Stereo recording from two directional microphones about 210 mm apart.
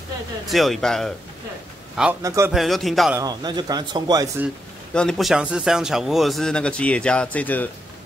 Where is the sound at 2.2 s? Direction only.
15° right (ahead or behind).